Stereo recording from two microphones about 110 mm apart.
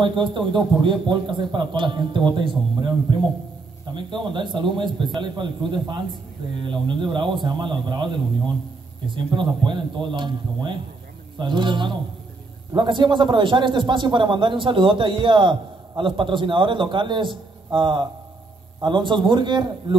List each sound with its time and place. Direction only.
0.0 s a man's voice: 50° right (ahead or behind)
3.9 s a man's voice: 45° right (ahead or behind)